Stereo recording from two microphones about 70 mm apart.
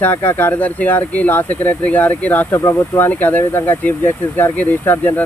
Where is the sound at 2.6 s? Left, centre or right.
Left.